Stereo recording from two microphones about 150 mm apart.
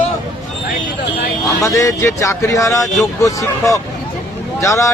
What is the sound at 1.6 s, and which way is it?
Speech, 20° left (ahead or behind).